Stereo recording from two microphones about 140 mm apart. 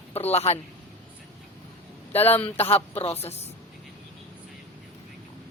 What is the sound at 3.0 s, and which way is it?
Speech, 45° left (ahead or behind).